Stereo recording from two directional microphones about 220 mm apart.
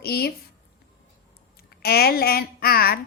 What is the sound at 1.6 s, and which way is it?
Speech, 45° left (ahead or behind).